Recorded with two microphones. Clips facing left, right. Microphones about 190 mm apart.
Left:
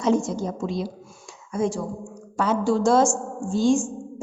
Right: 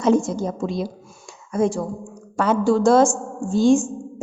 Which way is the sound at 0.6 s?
55° right (ahead or behind).